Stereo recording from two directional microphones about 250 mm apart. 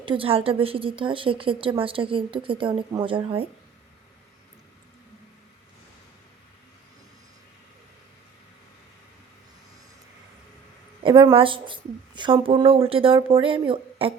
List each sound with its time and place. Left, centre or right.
0.0 s a woman's voice: right
11.0 s a woman's voice: centre